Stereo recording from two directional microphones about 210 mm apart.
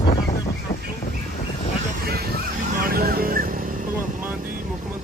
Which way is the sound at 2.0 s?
45° right (ahead or behind).